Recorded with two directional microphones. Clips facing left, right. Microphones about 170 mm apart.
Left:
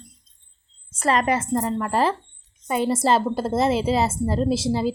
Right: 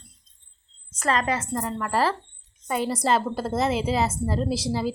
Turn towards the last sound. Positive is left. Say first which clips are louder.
# left 4 dB
turn(degrees=25)  # may be behind; listen again after turning